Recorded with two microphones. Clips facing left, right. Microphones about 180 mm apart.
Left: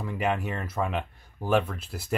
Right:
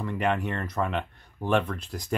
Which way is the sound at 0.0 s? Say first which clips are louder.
Right 1 dB; 5° left (ahead or behind).